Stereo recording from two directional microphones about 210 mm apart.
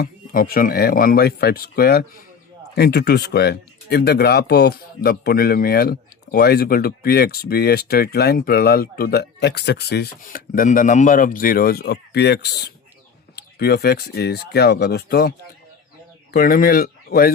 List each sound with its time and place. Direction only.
0.0 s speech: 45° left (ahead or behind)
16.3 s speech: 45° left (ahead or behind)